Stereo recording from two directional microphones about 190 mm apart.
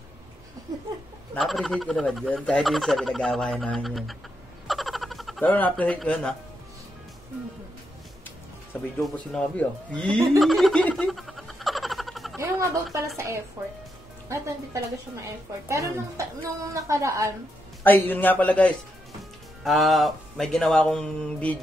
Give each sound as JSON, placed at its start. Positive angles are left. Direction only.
{"t": 1.3, "sound": "speech", "side_deg": 0}
{"t": 4.6, "sound": "a sound", "side_deg": 0}
{"t": 9.0, "sound": "speech", "side_deg": 5}
{"t": 10.4, "sound": "a sound", "side_deg": 0}
{"t": 12.4, "sound": "a woman's voice", "side_deg": -15}
{"t": 14.3, "sound": "a woman's voice", "side_deg": -15}
{"t": 17.8, "sound": "a man's voice", "side_deg": 10}